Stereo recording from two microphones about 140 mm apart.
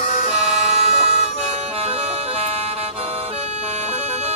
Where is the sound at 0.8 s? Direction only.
50° right (ahead or behind).